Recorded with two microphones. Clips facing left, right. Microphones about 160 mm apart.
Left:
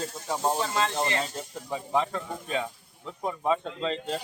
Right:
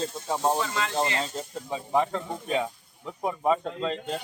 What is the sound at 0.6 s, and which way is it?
Speech, 35° left (ahead or behind).